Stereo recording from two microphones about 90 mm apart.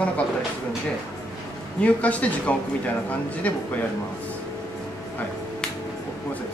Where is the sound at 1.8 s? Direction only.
15° left (ahead or behind).